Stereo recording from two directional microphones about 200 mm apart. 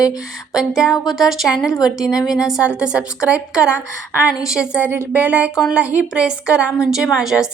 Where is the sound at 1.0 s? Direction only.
Centre (ahead or behind).